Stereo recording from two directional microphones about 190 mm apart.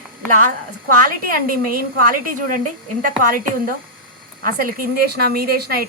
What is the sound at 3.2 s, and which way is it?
A woman's voice, 45° right (ahead or behind).